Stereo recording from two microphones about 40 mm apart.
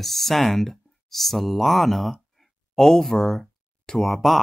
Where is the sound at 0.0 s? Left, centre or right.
Centre.